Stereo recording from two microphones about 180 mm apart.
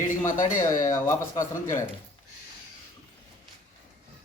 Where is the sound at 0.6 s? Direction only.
15° left (ahead or behind).